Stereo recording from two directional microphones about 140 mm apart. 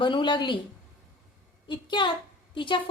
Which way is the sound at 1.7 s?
35° left (ahead or behind).